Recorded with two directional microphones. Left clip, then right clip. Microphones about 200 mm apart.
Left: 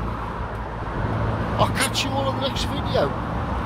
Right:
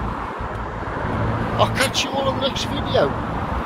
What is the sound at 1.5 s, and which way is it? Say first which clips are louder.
Speech: right 3 dB; centre (ahead or behind).